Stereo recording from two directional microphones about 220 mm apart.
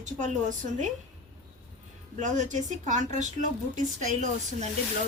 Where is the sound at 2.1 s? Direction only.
35° right (ahead or behind).